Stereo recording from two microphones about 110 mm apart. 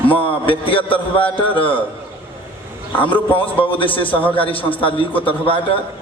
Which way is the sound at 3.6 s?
50° left (ahead or behind).